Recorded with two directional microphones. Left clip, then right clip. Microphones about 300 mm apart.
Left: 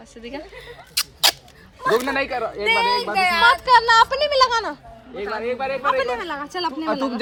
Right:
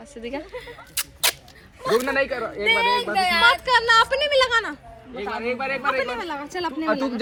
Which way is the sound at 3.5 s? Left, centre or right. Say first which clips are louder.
Left 3 dB; centre.